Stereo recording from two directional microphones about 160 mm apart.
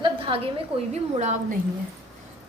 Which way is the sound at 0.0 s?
35° right (ahead or behind).